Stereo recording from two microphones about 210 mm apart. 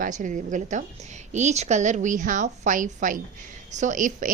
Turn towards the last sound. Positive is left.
turn(degrees=-40)  # may be behind; listen again after turning